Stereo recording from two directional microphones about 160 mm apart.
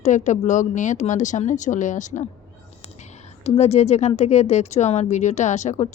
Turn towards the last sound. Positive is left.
turn(degrees=45)  # may be behind; listen again after turning